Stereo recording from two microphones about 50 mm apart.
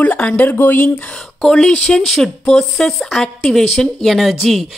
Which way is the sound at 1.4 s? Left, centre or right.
Centre.